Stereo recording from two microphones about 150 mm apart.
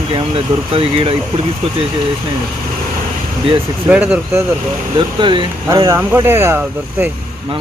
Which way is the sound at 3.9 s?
10° right (ahead or behind).